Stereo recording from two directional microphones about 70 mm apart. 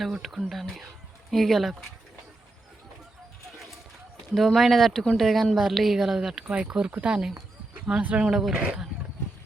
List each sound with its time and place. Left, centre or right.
0.0 s speech: centre
4.4 s a woman's voice: centre
6.4 s speech: centre